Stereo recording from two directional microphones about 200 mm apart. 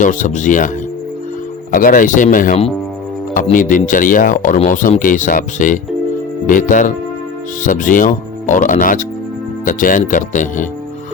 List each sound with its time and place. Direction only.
0.0 s speech: 40° left (ahead or behind)
1.7 s speech: 45° left (ahead or behind)